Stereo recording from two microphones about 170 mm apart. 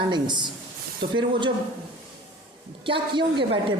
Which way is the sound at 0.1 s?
25° right (ahead or behind).